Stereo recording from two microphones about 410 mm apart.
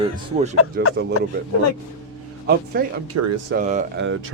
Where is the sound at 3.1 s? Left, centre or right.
Right.